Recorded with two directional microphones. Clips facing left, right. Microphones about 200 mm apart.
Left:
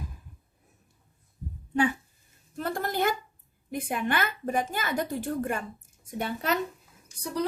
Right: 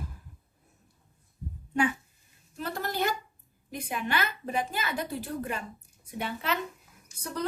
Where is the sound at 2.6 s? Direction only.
50° left (ahead or behind).